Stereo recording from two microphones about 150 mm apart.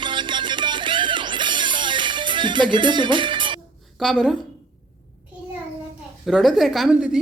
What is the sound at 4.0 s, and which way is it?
Speech, 5° left (ahead or behind).